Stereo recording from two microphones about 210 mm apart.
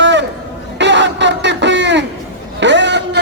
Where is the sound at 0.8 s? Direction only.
60° right (ahead or behind).